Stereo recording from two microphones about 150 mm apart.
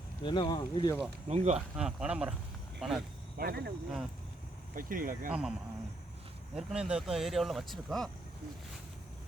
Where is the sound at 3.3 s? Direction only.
85° right.